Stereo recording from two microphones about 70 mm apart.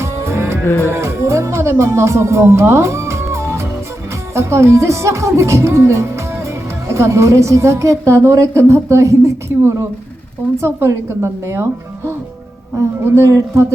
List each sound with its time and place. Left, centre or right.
0.0 s music: right
0.6 s music: left
0.9 s music: right
4.4 s a woman's voice: right